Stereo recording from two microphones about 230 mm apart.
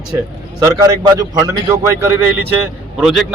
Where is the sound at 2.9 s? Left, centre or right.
Centre.